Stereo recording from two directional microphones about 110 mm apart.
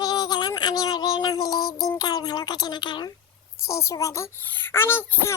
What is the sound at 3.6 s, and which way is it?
Speech, 25° left (ahead or behind).